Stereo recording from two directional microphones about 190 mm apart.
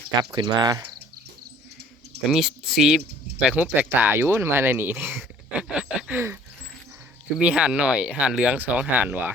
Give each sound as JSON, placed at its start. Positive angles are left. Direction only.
{"t": 0.2, "sound": "speech", "side_deg": -20}
{"t": 2.3, "sound": "speech", "side_deg": 0}
{"t": 5.1, "sound": "a sound", "side_deg": -5}
{"t": 7.3, "sound": "speech", "side_deg": -5}